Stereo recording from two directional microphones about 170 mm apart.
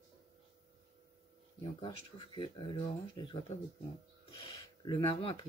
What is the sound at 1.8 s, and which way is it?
Speech, 30° left (ahead or behind).